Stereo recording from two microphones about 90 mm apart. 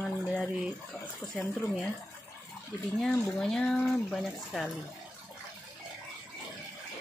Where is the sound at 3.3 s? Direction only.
10° left (ahead or behind).